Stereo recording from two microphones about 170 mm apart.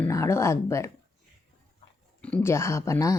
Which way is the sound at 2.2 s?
10° left (ahead or behind).